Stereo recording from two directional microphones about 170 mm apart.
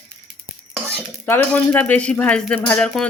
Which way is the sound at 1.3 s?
10° left (ahead or behind).